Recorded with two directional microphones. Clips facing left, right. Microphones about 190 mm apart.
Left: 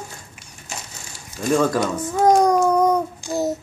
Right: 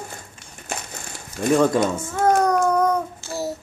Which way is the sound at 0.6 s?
60° right (ahead or behind).